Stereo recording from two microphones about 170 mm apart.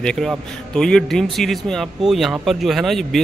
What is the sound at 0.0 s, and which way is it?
A man's voice, 5° left (ahead or behind).